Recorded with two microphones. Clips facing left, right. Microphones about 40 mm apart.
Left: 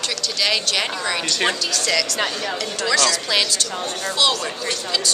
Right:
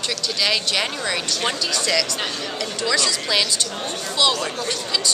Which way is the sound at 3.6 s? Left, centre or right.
Centre.